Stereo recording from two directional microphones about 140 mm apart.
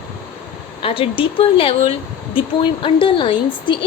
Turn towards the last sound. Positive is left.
turn(degrees=35)  # may be behind; listen again after turning